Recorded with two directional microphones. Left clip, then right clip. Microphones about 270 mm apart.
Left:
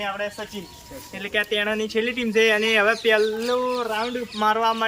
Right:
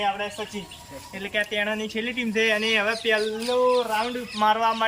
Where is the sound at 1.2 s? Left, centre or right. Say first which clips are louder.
Left 2 dB; centre.